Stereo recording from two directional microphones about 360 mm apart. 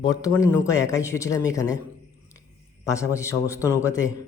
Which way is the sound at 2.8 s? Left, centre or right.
Centre.